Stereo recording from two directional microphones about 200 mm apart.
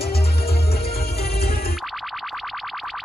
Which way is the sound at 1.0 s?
50° left (ahead or behind).